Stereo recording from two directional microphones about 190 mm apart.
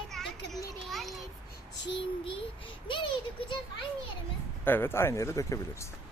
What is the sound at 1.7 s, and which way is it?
Child singing, 65° left (ahead or behind).